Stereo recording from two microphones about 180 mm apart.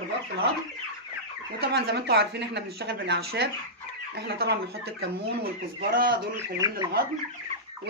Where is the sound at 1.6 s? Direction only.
60° right (ahead or behind).